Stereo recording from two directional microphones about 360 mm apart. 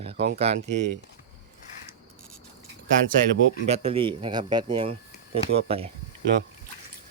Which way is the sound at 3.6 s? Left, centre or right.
Centre.